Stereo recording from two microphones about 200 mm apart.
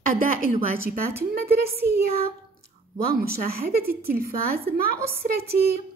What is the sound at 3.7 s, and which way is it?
A woman's voice, 50° right (ahead or behind).